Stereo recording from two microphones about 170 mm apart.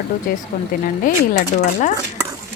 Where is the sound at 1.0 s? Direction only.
50° left (ahead or behind).